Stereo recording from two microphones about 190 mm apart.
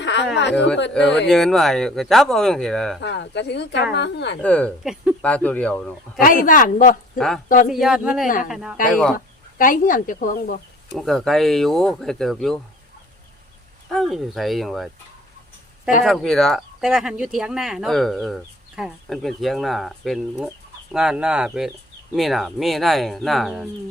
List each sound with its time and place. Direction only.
0.0 s a sound: 65° left (ahead or behind)
0.5 s speech: 5° left (ahead or behind)
3.0 s speech: 65° left (ahead or behind)
4.4 s speech: 5° left (ahead or behind)
6.1 s speech: 45° left (ahead or behind)
7.2 s speech: centre (ahead or behind)
7.4 s speech: 45° left (ahead or behind)
7.7 s speech: centre (ahead or behind)
9.1 s speech: 45° left (ahead or behind)
10.9 s speech: centre (ahead or behind)
13.9 s speech: centre (ahead or behind)
16.0 s speech: centre (ahead or behind)